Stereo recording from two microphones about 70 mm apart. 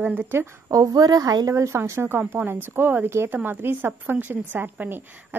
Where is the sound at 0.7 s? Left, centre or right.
Right.